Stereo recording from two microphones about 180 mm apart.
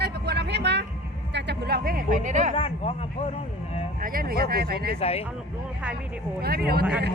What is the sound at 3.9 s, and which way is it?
Speech, 50° right (ahead or behind).